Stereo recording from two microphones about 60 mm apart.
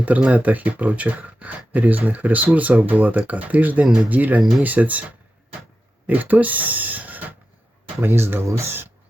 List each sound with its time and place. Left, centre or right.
0.0 s speech: right
3.8 s speech: centre
4.1 s speech: right
8.0 s speech: right